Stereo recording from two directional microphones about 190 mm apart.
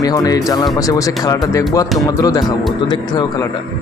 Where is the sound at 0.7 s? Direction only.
15° left (ahead or behind).